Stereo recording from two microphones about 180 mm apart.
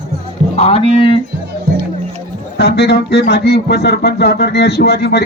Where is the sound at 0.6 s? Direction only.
35° left (ahead or behind).